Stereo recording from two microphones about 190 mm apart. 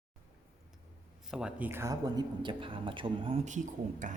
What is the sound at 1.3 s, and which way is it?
Speech, 5° right (ahead or behind).